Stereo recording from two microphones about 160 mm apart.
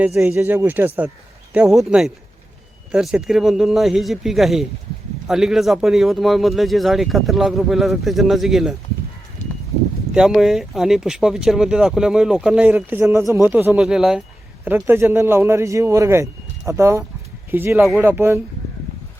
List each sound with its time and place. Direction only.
0.0 s a man's voice: 15° right (ahead or behind)
10.2 s speech: centre (ahead or behind)
13.7 s speech: 5° right (ahead or behind)
14.8 s a man's voice: 15° right (ahead or behind)